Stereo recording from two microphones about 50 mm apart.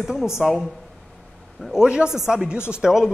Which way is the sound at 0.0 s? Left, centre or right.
Centre.